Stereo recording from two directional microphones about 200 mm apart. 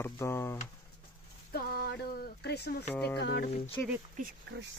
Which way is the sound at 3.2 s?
55° left (ahead or behind).